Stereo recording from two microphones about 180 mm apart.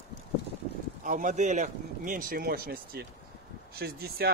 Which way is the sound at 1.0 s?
45° right (ahead or behind).